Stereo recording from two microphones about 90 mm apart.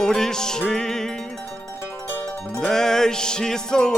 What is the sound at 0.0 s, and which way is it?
Music, 5° left (ahead or behind).